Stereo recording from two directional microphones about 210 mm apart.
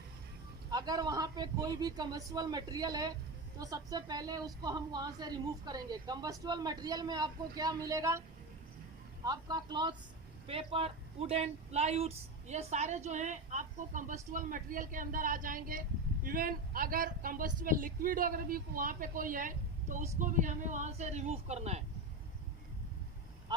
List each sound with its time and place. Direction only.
0.7 s a woman's voice: 20° right (ahead or behind)
9.2 s a woman's voice: 20° right (ahead or behind)